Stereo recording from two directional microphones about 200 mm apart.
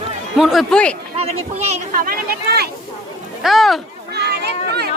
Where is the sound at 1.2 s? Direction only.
30° right (ahead or behind).